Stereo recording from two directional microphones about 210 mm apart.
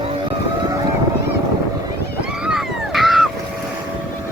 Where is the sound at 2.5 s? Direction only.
Centre (ahead or behind).